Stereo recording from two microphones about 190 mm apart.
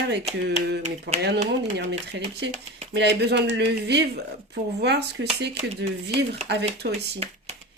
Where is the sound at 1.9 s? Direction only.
70° right (ahead or behind).